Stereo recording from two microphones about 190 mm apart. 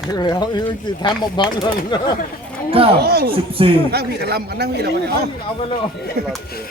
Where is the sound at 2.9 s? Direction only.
55° right (ahead or behind).